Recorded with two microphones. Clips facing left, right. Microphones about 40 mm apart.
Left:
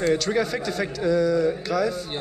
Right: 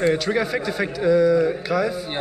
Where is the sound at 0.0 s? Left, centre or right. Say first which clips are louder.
Right 2 dB; centre.